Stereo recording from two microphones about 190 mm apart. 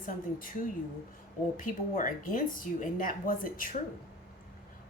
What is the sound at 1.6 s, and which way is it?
A woman's voice, 45° left (ahead or behind).